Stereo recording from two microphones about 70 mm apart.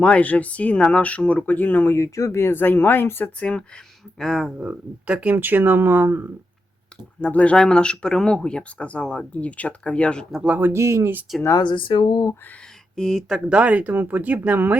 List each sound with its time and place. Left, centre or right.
0.0 s speech: centre
3.5 s speech: centre
4.6 s speech: centre
5.3 s speech: right
7.2 s speech: centre
10.3 s speech: centre
10.6 s speech: right
13.0 s speech: centre
13.5 s speech: centre